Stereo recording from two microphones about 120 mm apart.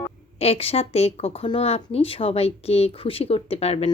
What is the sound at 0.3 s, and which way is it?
Speech, 55° left (ahead or behind).